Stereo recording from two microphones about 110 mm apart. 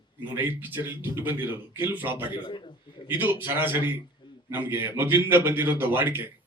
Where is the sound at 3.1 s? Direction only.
20° right (ahead or behind).